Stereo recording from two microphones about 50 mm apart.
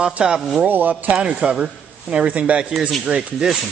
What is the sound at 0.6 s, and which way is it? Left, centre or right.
Speech, right.